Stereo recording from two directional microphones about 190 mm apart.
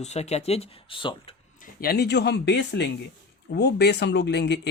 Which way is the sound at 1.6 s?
50° left (ahead or behind).